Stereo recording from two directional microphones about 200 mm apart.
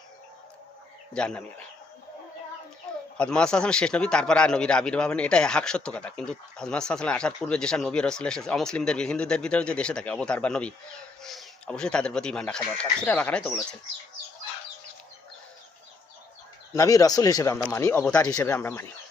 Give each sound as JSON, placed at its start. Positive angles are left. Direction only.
{"t": 1.1, "sound": "a man's voice", "side_deg": 5}
{"t": 3.2, "sound": "a man's voice", "side_deg": 5}
{"t": 16.7, "sound": "speech", "side_deg": 15}